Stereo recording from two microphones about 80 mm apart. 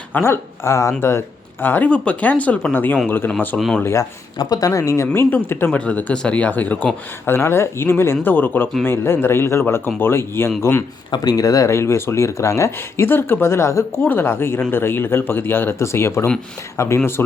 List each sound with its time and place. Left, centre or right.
0.1 s speech: left
1.6 s speech: left
4.4 s speech: left
4.8 s speech: left; by 6.9 s centre
7.3 s speech: left
11.1 s speech: left
14.0 s speech: left